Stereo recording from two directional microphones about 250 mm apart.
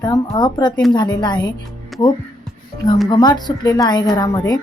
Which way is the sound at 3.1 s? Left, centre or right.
Centre.